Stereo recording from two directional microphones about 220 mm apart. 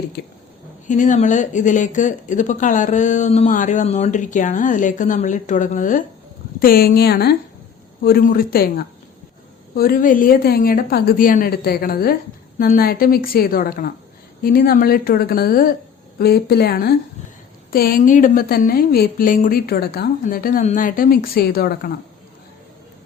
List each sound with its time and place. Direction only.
0.2 s a woman's voice: 50° left (ahead or behind)
0.9 s a woman's voice: 35° left (ahead or behind)